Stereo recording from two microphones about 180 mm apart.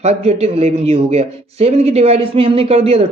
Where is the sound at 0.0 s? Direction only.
35° right (ahead or behind).